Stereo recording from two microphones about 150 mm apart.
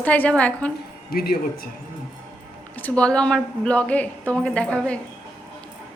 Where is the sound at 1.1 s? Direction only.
90° left.